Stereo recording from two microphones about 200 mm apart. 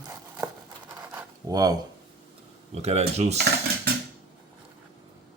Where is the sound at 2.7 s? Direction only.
30° right (ahead or behind).